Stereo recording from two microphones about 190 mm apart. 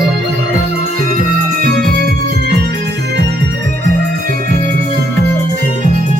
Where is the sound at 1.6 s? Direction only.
50° right (ahead or behind).